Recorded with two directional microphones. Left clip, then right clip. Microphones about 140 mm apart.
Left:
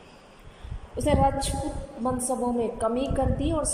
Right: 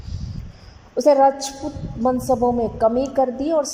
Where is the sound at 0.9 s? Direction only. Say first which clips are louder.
Right 9 dB; 35° right (ahead or behind).